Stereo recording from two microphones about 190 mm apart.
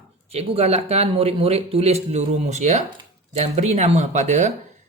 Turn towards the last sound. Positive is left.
turn(degrees=-40)  # may be behind; listen again after turning